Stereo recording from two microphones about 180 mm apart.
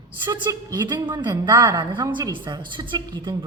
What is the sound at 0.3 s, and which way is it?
A woman's voice, 25° right (ahead or behind).